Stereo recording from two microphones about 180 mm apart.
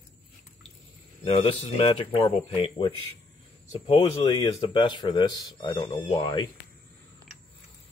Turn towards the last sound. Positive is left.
turn(degrees=25)  # may be behind; listen again after turning